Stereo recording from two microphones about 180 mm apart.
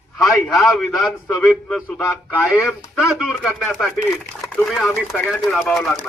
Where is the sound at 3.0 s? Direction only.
Centre (ahead or behind).